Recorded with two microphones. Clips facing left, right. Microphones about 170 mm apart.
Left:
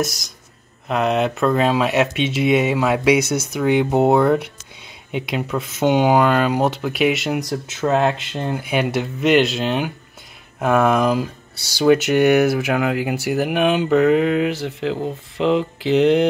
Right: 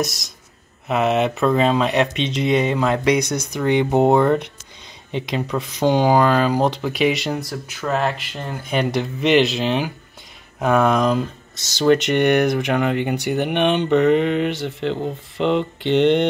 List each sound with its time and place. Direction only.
0.0 s speech: centre (ahead or behind)
7.3 s speech: 20° left (ahead or behind)
8.6 s speech: 5° left (ahead or behind)